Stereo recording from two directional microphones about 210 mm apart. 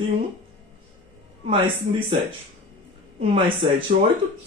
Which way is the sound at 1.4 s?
25° right (ahead or behind).